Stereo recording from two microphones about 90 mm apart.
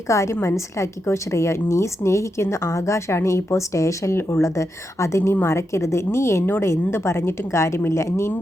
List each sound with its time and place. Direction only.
0.1 s a woman's voice: 35° left (ahead or behind)